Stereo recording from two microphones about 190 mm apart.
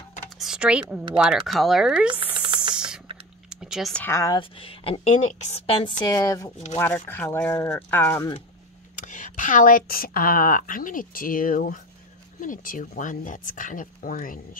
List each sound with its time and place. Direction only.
0.4 s speech: 5° right (ahead or behind)
2.7 s a sound: 5° right (ahead or behind)
3.4 s speech: 5° right (ahead or behind); by 8.4 s 15° left (ahead or behind)
8.9 s a woman's voice: 40° left (ahead or behind)